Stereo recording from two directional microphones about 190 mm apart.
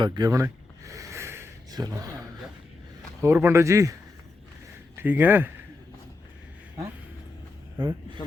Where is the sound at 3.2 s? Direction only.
10° right (ahead or behind).